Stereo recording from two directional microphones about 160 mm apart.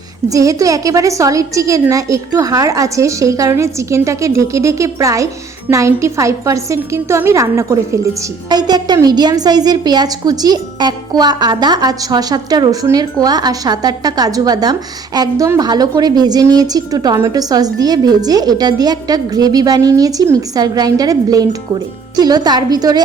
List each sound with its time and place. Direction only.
0.3 s a woman's voice: 20° right (ahead or behind)